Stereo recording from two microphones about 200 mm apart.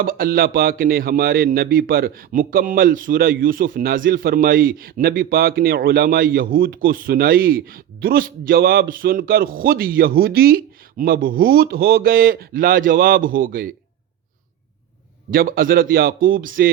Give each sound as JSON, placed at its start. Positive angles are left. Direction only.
{"t": 0.0, "sound": "speech", "side_deg": -45}
{"t": 15.3, "sound": "speech", "side_deg": -45}